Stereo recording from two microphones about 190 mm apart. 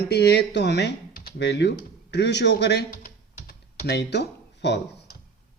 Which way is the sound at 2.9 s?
45° left (ahead or behind).